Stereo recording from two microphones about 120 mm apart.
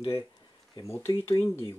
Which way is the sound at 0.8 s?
25° left (ahead or behind).